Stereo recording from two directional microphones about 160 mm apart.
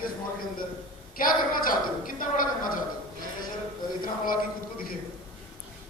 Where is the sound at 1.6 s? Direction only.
60° left (ahead or behind).